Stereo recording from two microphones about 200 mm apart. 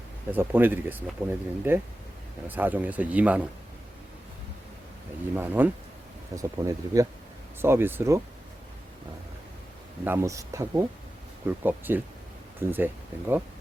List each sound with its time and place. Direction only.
0.3 s speech: 10° right (ahead or behind)
5.3 s speech: 10° right (ahead or behind)
10.0 s speech: 10° right (ahead or behind)